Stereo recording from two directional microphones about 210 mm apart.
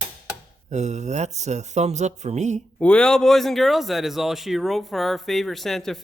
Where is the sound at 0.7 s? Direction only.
35° right (ahead or behind).